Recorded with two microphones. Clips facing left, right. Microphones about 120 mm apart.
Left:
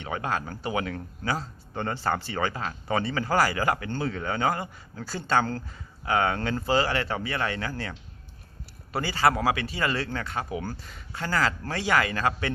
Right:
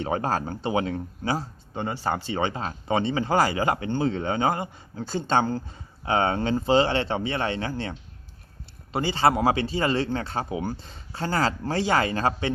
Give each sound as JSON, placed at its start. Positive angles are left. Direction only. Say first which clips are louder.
{"t": 0.0, "sound": "speech", "louder": "right 4 dB", "side_deg": -35}